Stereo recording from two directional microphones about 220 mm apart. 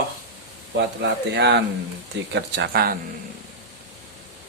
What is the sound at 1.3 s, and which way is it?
Speech, 50° right (ahead or behind).